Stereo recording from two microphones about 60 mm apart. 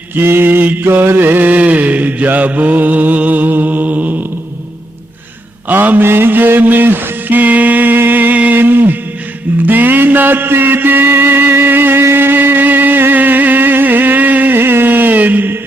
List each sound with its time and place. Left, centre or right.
0.2 s mantra: right
5.6 s mantra: right
6.1 s music: right